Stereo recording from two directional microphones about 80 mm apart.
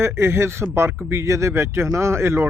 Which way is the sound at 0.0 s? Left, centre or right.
Right.